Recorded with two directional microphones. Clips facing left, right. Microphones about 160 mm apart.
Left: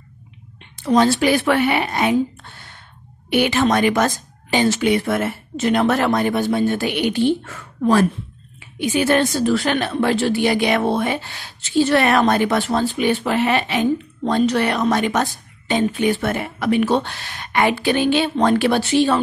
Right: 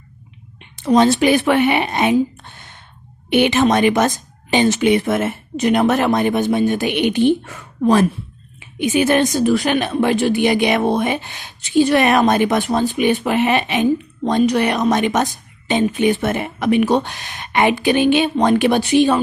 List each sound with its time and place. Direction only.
0.6 s a woman's voice: 20° right (ahead or behind)